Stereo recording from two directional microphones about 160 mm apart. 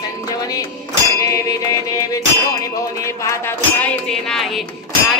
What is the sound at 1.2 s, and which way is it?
Music, 20° left (ahead or behind).